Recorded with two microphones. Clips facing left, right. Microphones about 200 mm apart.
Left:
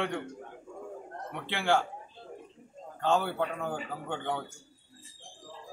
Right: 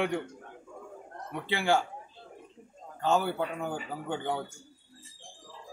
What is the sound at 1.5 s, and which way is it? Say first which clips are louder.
Speech: right 1 dB; 5° right (ahead or behind).